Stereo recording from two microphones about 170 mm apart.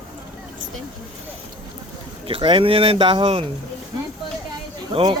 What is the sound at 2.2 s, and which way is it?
Speech, 30° right (ahead or behind).